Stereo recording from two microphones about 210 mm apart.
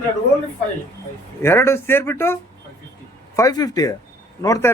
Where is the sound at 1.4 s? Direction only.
10° left (ahead or behind).